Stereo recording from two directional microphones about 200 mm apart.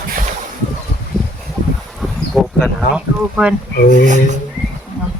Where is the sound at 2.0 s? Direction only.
Centre (ahead or behind).